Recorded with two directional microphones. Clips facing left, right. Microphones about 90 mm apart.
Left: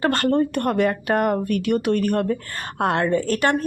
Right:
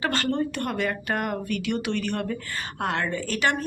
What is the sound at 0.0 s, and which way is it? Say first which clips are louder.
Speech: left 6 dB; 50° left (ahead or behind).